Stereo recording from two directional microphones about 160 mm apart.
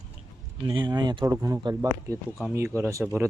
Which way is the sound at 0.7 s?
30° right (ahead or behind).